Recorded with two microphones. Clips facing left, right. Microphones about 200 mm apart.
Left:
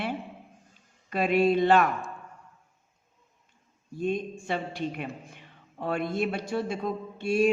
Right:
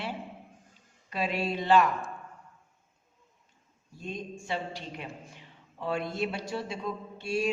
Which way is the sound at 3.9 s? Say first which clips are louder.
Left 9 dB; 55° left (ahead or behind).